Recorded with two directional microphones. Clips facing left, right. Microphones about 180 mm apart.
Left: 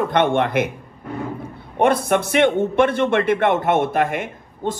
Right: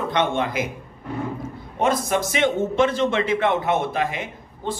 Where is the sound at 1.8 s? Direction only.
60° left (ahead or behind).